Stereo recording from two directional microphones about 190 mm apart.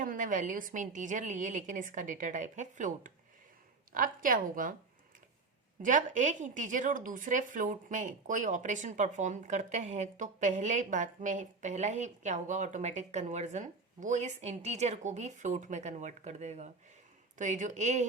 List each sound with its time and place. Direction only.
0.0 s a woman's voice: 45° right (ahead or behind)
5.8 s speech: 40° right (ahead or behind)